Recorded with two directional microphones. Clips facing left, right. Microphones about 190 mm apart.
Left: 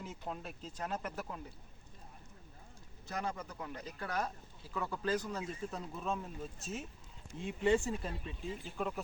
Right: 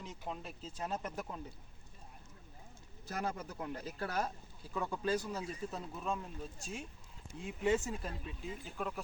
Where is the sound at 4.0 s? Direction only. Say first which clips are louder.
Even; 30° right (ahead or behind).